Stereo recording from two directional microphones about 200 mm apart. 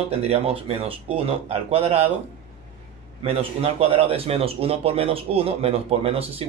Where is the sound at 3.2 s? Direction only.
30° right (ahead or behind).